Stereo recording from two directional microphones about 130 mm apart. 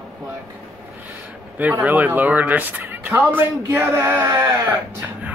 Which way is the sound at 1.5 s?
15° right (ahead or behind).